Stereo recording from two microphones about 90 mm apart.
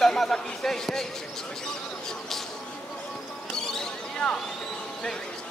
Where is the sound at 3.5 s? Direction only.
5° left (ahead or behind).